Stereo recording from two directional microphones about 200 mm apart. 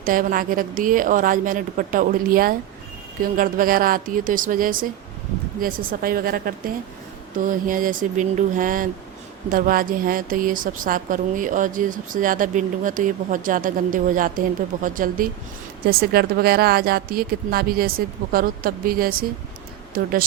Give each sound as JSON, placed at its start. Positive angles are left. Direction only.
{"t": 0.0, "sound": "a woman's voice", "side_deg": -45}